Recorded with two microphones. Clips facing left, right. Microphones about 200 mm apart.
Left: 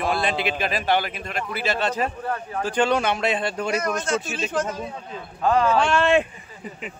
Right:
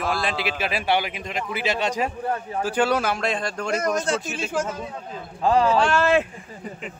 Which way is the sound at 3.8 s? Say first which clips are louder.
Right 1 dB; 35° right (ahead or behind).